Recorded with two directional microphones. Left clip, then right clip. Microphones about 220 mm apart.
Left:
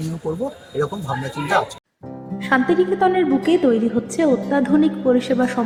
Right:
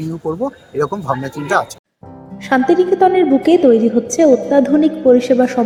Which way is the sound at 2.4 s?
15° right (ahead or behind).